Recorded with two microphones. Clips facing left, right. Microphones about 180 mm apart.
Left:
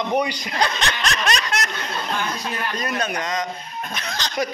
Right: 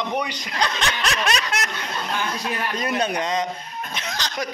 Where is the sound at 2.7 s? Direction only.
25° right (ahead or behind).